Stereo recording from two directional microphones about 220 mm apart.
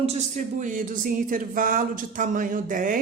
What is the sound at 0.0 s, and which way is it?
Speech, 30° right (ahead or behind).